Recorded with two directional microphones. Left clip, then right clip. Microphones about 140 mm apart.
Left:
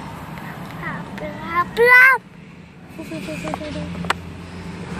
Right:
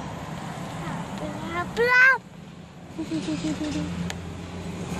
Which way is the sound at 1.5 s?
30° right (ahead or behind).